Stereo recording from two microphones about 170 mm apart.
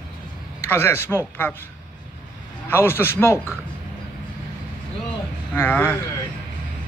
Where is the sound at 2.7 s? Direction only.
15° left (ahead or behind).